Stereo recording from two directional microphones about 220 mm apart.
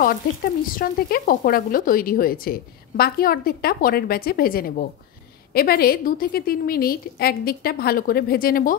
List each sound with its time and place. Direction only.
0.7 s a woman's voice: 40° left (ahead or behind)